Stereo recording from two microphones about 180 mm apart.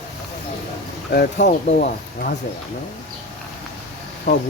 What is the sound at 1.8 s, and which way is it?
Speech, 55° left (ahead or behind).